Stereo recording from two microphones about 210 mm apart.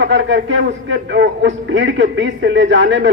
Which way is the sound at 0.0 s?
60° right (ahead or behind).